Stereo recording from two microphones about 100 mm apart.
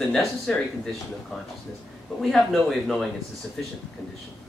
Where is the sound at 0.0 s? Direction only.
5° left (ahead or behind).